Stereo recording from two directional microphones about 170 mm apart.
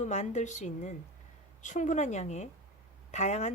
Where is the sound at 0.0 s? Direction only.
40° left (ahead or behind).